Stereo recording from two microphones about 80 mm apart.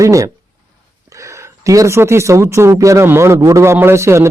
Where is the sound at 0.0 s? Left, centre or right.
Right.